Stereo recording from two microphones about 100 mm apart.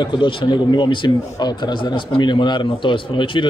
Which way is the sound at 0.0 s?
50° left (ahead or behind).